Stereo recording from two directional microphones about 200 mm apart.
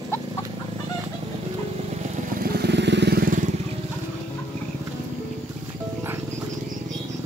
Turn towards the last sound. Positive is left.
turn(degrees=-10)  # may be behind; listen again after turning